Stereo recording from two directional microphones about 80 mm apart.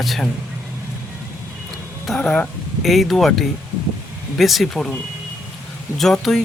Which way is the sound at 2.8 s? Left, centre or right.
Centre.